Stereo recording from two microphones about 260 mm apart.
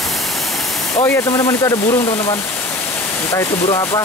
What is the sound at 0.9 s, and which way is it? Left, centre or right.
Speech, centre.